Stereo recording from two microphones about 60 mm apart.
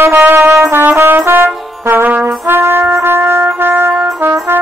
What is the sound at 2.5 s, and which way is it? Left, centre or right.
Trumpet, right.